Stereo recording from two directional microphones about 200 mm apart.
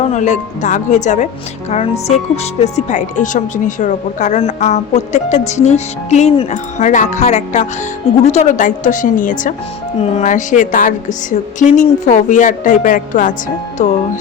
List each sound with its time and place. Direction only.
0.0 s speech: 35° left (ahead or behind)